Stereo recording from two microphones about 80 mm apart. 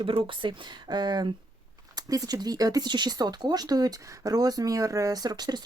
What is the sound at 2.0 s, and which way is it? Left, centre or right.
Speech, right.